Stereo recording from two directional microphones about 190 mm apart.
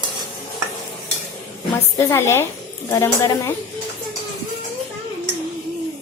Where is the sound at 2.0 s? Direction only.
15° left (ahead or behind).